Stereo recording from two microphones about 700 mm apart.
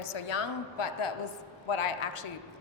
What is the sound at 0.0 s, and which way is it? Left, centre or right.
A woman's voice, left.